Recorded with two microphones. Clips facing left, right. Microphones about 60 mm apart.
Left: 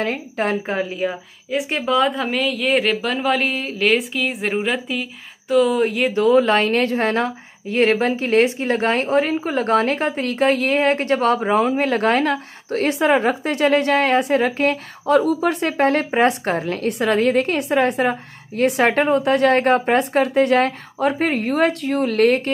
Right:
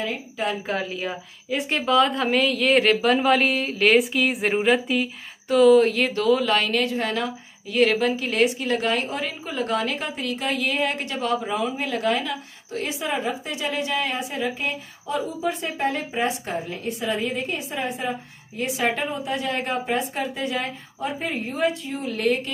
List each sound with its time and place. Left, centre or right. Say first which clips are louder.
0.0 s a woman's voice: left 5 dB; left
0.7 s a woman's voice: left 5 dB; centre
6.2 s a woman's voice: left 6 dB; left